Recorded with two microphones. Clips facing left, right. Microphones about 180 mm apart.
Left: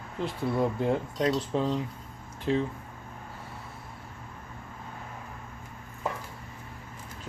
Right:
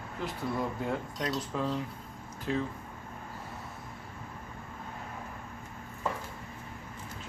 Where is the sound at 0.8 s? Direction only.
25° left (ahead or behind).